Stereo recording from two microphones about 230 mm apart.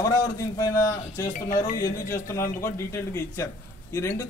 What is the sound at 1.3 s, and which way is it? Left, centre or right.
Speech, left.